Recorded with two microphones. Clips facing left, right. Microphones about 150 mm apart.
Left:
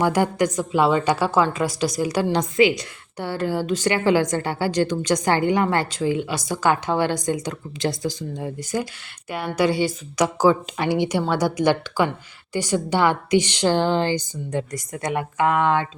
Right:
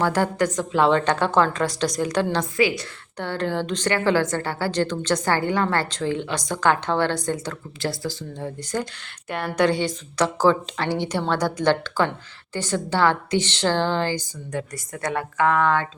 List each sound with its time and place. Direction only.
0.0 s a woman's voice: 15° left (ahead or behind)
3.2 s a woman's voice: 10° left (ahead or behind)